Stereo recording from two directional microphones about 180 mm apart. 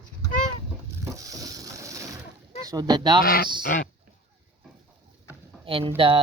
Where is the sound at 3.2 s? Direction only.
55° left (ahead or behind).